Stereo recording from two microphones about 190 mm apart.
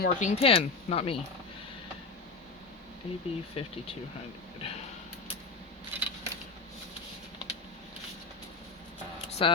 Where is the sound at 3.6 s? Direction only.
30° left (ahead or behind).